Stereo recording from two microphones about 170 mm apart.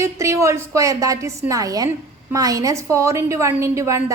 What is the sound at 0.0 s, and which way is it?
A woman's voice, 15° right (ahead or behind).